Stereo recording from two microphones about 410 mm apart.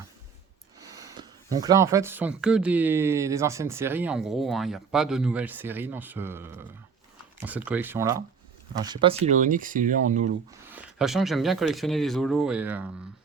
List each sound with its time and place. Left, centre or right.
0.8 s speech: centre
10.7 s speech: centre